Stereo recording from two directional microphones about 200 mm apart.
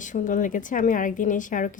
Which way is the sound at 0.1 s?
40° left (ahead or behind).